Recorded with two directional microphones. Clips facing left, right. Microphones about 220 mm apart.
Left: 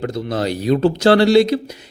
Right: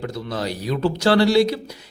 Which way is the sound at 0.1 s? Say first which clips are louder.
Left 6 dB; 25° left (ahead or behind).